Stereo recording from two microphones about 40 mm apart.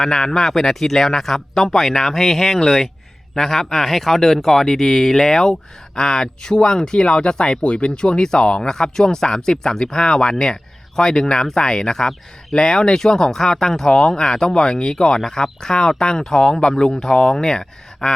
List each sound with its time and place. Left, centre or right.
0.0 s speech: centre